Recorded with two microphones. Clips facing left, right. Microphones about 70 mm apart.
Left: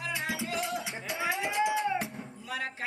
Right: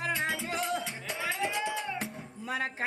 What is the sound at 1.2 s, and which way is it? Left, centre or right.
Music, centre.